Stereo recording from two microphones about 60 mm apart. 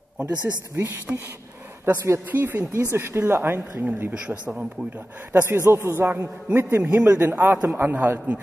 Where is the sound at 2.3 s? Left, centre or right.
Right.